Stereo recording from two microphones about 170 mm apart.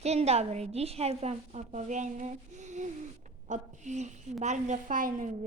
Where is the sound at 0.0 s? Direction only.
40° right (ahead or behind).